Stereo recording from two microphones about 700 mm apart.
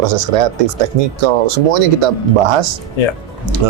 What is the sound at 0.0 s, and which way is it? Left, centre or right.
Speech, right.